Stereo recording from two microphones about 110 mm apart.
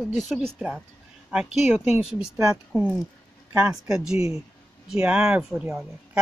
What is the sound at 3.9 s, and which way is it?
Speech, 5° right (ahead or behind).